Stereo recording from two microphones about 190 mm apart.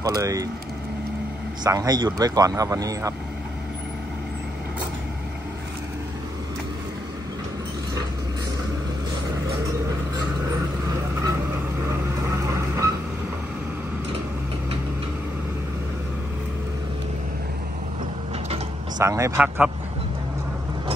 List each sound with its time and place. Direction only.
0.0 s speech: 20° right (ahead or behind)
1.6 s speech: 20° right (ahead or behind)
12.4 s vehicle: 15° right (ahead or behind)
18.9 s speech: 15° right (ahead or behind)